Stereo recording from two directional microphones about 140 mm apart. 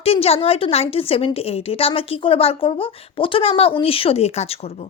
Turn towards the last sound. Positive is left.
turn(degrees=45)  # may be behind; listen again after turning